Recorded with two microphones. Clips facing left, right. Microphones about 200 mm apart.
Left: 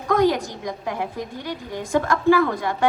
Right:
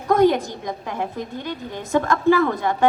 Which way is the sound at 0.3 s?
25° right (ahead or behind).